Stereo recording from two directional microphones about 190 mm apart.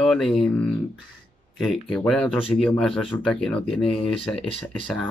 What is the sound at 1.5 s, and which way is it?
Speech, centre (ahead or behind).